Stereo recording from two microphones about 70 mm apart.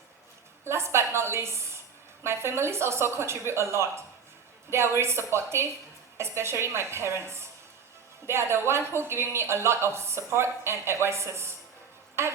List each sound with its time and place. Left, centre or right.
0.6 s a woman's voice: right